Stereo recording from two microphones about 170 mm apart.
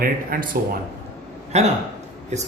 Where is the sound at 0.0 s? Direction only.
60° right (ahead or behind).